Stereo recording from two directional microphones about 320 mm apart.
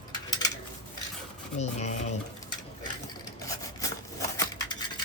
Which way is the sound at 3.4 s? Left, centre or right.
Centre.